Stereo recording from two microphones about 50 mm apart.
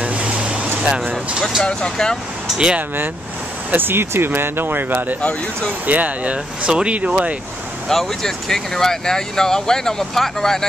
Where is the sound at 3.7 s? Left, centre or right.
Right.